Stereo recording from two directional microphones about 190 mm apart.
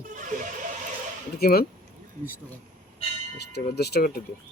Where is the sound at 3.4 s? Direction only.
60° left (ahead or behind).